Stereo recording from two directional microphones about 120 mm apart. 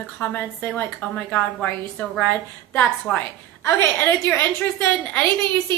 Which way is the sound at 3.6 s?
20° left (ahead or behind).